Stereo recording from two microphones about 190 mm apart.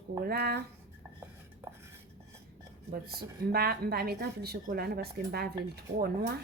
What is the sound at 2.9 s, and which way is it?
A woman's voice, 55° right (ahead or behind).